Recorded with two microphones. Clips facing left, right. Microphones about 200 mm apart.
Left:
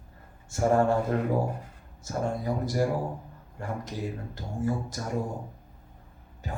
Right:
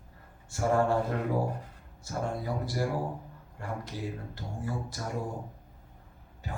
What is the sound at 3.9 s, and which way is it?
Speech, 45° left (ahead or behind).